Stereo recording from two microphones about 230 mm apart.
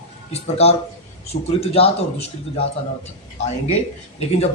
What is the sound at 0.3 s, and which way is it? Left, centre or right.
A man's voice, left.